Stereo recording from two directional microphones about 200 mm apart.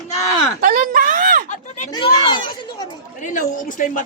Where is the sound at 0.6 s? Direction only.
45° right (ahead or behind).